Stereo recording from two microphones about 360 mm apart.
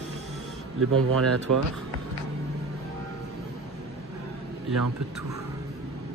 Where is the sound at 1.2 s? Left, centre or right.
Right.